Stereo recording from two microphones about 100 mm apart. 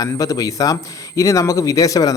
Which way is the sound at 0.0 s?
35° left (ahead or behind).